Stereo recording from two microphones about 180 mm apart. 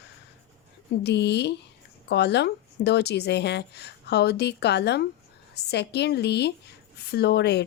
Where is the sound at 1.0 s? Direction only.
70° left (ahead or behind).